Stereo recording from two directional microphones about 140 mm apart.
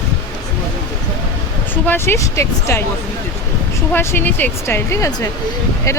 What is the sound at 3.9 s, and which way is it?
Speech, 15° left (ahead or behind).